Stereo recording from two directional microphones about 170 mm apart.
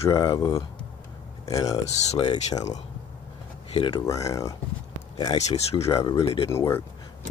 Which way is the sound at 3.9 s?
20° left (ahead or behind).